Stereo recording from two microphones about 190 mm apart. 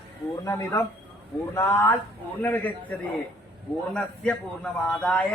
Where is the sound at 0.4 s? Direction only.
15° left (ahead or behind).